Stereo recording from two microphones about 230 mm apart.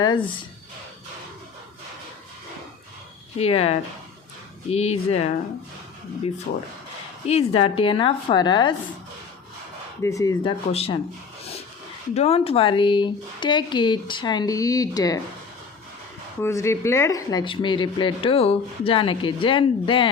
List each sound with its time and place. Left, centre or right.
0.0 s speech: centre
3.3 s speech: left
6.5 s speech: left
7.3 s speech: left
10.0 s speech: centre
10.7 s speech: left
12.1 s speech: left
16.4 s speech: centre